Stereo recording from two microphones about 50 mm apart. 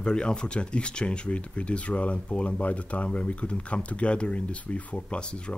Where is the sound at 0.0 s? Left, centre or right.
Centre.